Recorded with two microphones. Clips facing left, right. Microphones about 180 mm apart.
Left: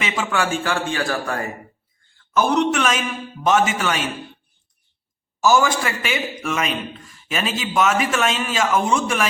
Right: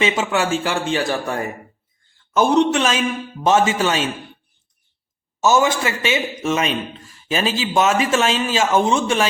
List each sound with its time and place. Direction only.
0.0 s a man's voice: 25° right (ahead or behind)
5.4 s a man's voice: 20° right (ahead or behind)